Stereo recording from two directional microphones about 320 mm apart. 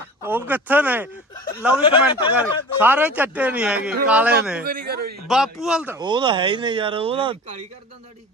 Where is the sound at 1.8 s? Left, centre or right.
Centre.